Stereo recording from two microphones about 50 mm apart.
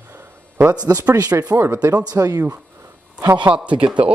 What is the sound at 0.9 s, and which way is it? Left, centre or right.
Speech, right.